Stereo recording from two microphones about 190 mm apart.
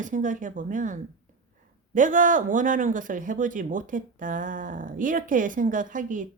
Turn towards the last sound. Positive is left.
turn(degrees=-45)  # may be behind; listen again after turning